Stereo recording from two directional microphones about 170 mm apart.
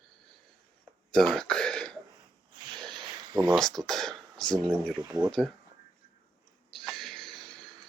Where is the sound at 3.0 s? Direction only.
25° right (ahead or behind).